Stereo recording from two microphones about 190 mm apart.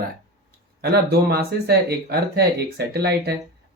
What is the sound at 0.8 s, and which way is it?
Speech, 55° right (ahead or behind).